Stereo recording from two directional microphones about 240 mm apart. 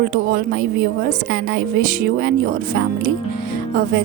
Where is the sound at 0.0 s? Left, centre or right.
Right.